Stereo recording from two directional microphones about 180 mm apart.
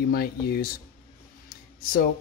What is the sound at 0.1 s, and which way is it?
Speech, 55° left (ahead or behind).